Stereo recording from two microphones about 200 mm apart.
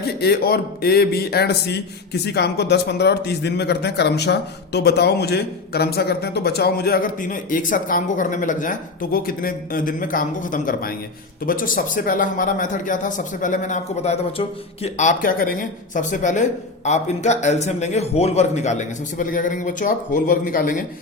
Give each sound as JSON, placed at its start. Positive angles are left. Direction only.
{"t": 0.2, "sound": "a man's voice", "side_deg": 50}